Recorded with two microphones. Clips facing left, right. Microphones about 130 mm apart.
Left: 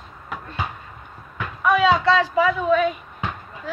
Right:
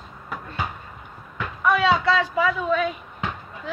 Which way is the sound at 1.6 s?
5° left (ahead or behind).